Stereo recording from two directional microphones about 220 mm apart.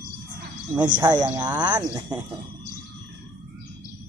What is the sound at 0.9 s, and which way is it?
Speech, 20° right (ahead or behind).